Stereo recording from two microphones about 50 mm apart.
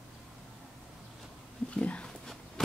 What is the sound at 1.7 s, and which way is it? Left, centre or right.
Dog, left.